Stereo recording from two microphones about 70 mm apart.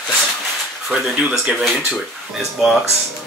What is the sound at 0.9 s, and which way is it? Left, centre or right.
Speech, centre.